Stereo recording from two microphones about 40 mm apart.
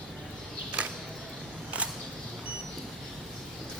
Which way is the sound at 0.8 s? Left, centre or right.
Right.